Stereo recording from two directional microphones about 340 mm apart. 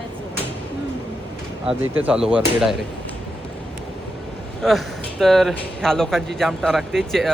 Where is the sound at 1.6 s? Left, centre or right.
Centre.